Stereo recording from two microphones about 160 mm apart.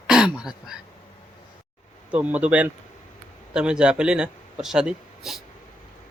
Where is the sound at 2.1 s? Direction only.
10° right (ahead or behind).